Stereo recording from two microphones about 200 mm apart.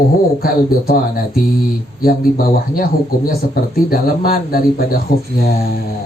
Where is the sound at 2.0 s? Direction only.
45° left (ahead or behind).